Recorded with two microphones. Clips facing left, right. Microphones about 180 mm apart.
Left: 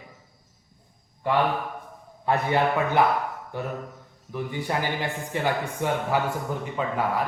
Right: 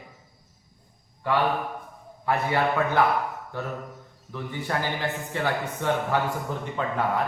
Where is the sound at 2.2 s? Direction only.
20° left (ahead or behind).